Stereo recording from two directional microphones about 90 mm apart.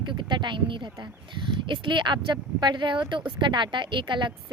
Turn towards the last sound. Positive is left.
turn(degrees=-60)  # may be behind; listen again after turning